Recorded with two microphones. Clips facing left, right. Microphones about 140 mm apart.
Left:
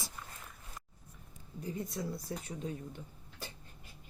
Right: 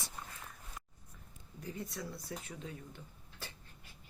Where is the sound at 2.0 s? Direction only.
20° left (ahead or behind).